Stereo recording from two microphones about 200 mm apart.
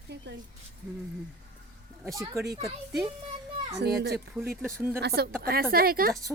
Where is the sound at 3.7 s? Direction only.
55° right (ahead or behind).